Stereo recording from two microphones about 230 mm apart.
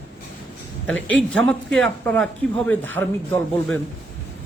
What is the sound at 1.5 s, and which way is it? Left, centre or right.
A man's voice, centre.